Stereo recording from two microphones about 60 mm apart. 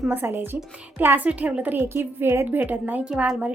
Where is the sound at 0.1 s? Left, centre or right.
Right.